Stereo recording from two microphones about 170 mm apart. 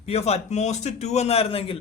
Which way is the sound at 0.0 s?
40° left (ahead or behind).